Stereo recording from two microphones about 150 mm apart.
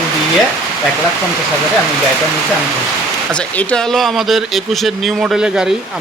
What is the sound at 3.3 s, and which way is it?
Speech, 10° left (ahead or behind).